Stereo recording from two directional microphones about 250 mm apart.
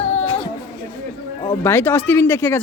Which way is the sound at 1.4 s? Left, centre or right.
Centre.